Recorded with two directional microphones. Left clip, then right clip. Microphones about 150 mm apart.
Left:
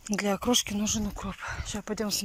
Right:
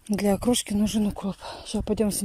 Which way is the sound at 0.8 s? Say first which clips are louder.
Right 4 dB; 55° right (ahead or behind).